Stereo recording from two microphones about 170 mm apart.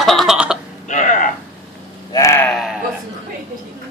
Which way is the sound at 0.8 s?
45° left (ahead or behind).